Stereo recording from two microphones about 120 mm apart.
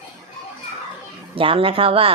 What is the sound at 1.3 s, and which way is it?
Speech, 50° right (ahead or behind).